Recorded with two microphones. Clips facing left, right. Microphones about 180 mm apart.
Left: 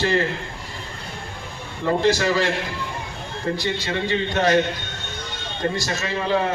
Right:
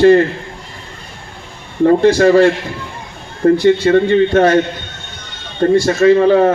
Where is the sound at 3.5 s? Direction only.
55° right (ahead or behind).